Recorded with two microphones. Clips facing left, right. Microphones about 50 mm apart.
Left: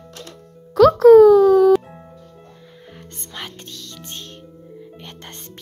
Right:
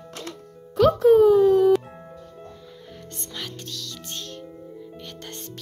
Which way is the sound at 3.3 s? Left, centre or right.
Left.